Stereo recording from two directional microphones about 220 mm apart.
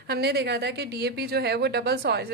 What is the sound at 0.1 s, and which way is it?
A woman's voice, 45° right (ahead or behind).